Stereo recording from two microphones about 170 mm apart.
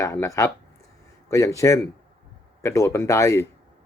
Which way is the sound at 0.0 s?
15° left (ahead or behind).